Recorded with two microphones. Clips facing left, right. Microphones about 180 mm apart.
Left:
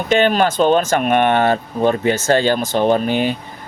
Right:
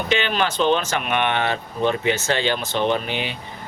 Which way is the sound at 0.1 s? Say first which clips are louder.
Left 9 dB; 45° left (ahead or behind).